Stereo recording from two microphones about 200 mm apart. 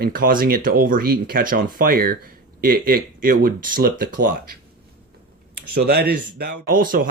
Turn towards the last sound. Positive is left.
turn(degrees=-45)  # may be behind; listen again after turning